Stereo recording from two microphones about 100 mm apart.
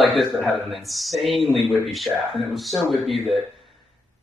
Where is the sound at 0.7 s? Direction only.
Centre (ahead or behind).